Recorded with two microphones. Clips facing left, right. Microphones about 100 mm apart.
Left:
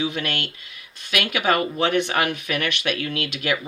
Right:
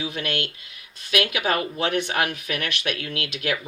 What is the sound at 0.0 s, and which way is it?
Speech, 60° left (ahead or behind).